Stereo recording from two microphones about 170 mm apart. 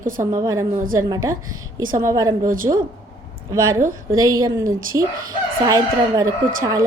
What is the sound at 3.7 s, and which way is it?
Speech, 50° right (ahead or behind).